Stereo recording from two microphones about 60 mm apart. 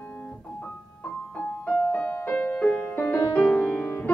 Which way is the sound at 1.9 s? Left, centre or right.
Left.